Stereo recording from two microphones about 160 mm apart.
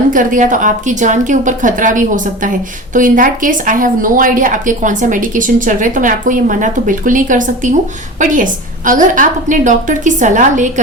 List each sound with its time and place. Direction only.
0.1 s a woman's voice: 55° right (ahead or behind)